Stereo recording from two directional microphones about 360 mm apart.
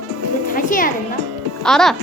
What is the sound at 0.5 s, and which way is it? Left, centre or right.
Speech, left.